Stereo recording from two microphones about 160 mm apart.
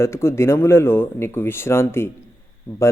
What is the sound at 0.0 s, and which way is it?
Speech, 15° left (ahead or behind).